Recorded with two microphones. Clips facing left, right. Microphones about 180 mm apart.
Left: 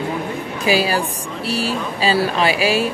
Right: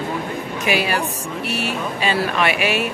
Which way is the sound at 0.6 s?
30° left (ahead or behind).